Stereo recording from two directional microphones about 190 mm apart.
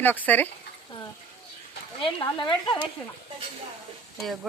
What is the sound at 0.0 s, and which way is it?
Speech, 10° left (ahead or behind).